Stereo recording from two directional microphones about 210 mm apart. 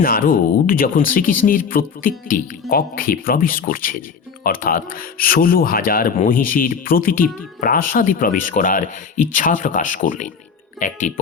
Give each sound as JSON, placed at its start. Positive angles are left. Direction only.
{"t": 0.0, "sound": "speech", "side_deg": 40}